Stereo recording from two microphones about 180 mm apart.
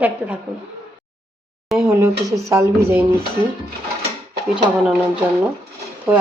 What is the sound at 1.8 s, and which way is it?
Speech, 15° right (ahead or behind).